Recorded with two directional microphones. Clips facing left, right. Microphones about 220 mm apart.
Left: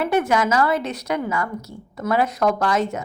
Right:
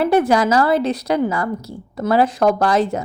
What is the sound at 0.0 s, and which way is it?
A woman's voice, 35° right (ahead or behind).